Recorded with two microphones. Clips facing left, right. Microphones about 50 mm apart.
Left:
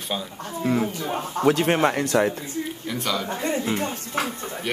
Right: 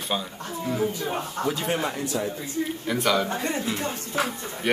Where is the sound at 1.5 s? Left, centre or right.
Left.